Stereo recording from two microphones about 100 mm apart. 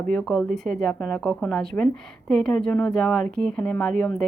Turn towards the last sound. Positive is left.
turn(degrees=10)  # may be behind; listen again after turning